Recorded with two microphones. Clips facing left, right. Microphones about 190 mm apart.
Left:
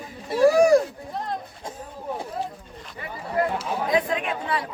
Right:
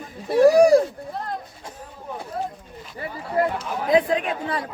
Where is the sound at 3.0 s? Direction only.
35° right (ahead or behind).